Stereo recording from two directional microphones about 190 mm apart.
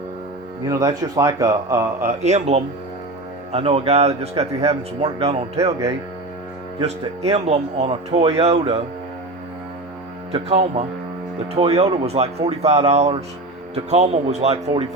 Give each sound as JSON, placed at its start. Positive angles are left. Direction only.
{"t": 0.7, "sound": "a man's voice", "side_deg": -20}
{"t": 2.2, "sound": "speech", "side_deg": -35}
{"t": 6.8, "sound": "speech", "side_deg": -35}
{"t": 10.3, "sound": "speech", "side_deg": -35}